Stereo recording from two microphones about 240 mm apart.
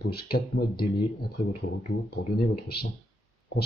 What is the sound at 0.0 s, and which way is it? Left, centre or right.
Speech, left.